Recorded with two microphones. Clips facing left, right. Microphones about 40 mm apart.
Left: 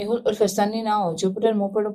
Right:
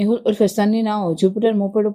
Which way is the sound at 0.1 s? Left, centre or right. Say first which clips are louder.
Right 4 dB; right.